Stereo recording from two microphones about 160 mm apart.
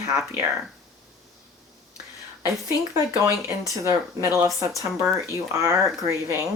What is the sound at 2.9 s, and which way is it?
Speech, 15° right (ahead or behind).